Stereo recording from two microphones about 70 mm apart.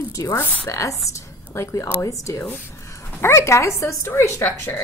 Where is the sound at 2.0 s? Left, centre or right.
Left.